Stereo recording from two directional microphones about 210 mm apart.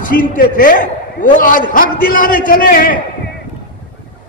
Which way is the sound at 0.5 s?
40° left (ahead or behind).